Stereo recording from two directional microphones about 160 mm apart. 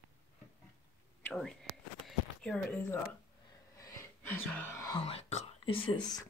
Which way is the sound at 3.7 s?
15° left (ahead or behind).